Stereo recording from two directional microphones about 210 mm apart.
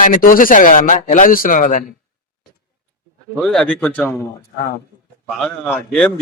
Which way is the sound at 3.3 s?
Centre (ahead or behind).